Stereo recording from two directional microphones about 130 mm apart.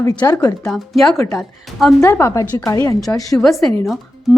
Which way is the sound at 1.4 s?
Centre (ahead or behind).